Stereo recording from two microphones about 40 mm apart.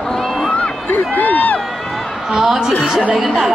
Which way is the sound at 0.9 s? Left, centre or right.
Left.